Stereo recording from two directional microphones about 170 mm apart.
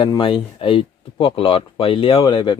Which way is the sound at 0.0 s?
30° left (ahead or behind).